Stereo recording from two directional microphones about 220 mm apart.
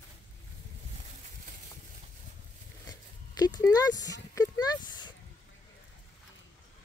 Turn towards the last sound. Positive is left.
turn(degrees=20)  # may be behind; listen again after turning